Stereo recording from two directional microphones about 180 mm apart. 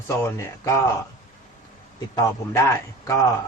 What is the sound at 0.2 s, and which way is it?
Speech, 15° left (ahead or behind).